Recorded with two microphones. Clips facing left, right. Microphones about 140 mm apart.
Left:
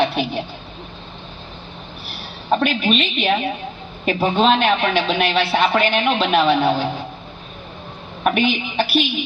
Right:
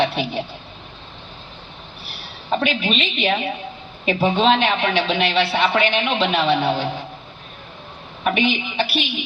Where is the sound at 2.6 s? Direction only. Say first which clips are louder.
Left 3 dB; 50° left (ahead or behind).